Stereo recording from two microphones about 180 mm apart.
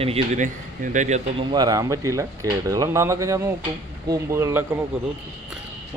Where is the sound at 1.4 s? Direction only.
20° right (ahead or behind).